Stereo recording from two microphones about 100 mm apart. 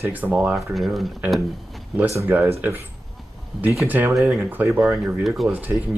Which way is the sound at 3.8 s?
20° right (ahead or behind).